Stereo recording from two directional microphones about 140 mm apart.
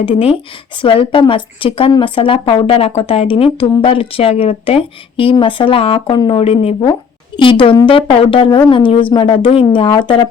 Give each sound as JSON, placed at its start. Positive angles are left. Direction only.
{"t": 0.0, "sound": "a woman's voice", "side_deg": 45}
{"t": 7.3, "sound": "a woman's voice", "side_deg": 35}